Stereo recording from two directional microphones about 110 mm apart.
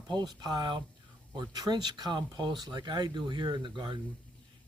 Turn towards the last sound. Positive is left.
turn(degrees=-45)  # may be behind; listen again after turning